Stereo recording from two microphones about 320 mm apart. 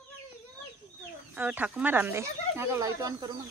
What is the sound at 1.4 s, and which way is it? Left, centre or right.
Speech, centre.